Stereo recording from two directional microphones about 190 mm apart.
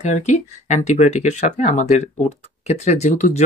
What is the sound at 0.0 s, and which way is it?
Speech, 35° left (ahead or behind).